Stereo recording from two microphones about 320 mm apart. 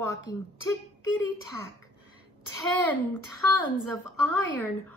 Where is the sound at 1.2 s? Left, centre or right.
Left.